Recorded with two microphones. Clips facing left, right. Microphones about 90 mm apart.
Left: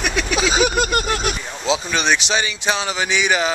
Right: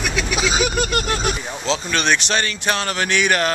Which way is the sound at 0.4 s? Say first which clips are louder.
Left 3 dB; 35° left (ahead or behind).